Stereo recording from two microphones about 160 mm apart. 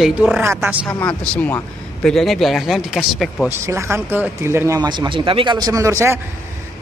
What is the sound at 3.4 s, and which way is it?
A man's voice, 15° right (ahead or behind).